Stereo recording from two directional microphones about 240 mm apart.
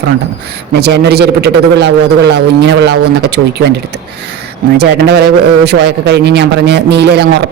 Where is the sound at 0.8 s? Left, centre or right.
Right.